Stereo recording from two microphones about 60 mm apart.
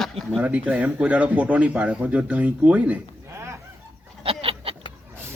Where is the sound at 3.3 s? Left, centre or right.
Right.